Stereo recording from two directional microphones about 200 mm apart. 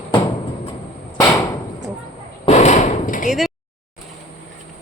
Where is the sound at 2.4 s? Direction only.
35° left (ahead or behind).